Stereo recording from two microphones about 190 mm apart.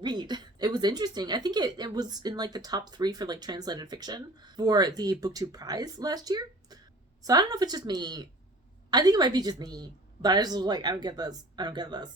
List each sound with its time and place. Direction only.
0.0 s speech: 20° right (ahead or behind)